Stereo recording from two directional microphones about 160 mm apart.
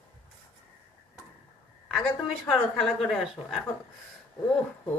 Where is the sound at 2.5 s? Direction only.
5° left (ahead or behind).